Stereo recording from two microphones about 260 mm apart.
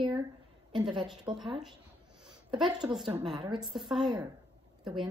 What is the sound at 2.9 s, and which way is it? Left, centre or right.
Speech, centre.